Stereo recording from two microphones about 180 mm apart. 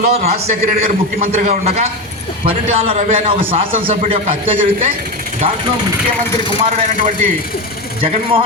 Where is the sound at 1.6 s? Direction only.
35° right (ahead or behind).